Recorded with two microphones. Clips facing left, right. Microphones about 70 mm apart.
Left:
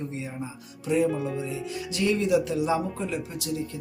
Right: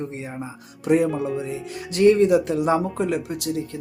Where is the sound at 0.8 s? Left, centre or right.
Right.